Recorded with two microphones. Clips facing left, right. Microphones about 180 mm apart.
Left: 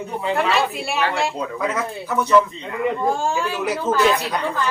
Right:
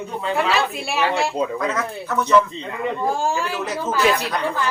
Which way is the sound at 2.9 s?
10° right (ahead or behind).